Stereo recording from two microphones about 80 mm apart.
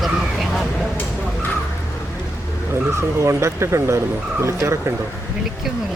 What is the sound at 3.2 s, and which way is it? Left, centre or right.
Speech, right.